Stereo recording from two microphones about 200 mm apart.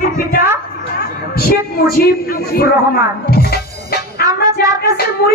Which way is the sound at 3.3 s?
50° left (ahead or behind).